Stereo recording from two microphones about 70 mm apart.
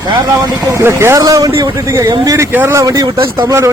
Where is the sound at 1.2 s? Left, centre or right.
Right.